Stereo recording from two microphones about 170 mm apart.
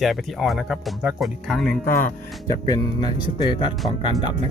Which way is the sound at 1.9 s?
55° left (ahead or behind).